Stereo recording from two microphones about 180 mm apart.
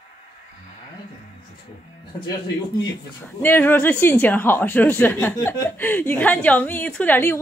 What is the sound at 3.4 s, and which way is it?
A woman's voice, 10° left (ahead or behind).